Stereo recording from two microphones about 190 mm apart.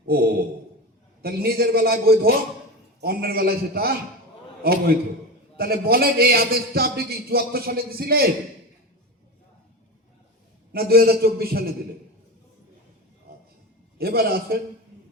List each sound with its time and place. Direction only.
0.0 s a man's voice: 55° right (ahead or behind)
10.7 s a man's voice: 55° right (ahead or behind)
14.0 s a man's voice: 55° right (ahead or behind)